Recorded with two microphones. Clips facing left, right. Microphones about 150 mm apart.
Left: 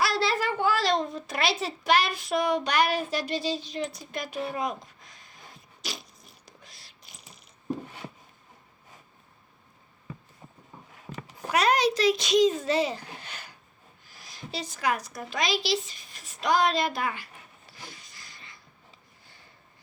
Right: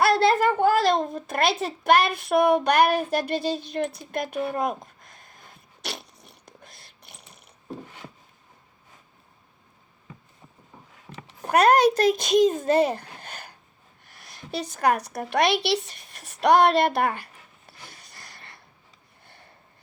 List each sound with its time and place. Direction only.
0.0 s a child's voice: 55° right (ahead or behind)
5.8 s zipper: 65° right (ahead or behind)
11.4 s a child's voice: 55° right (ahead or behind)
18.1 s a sound: 65° right (ahead or behind)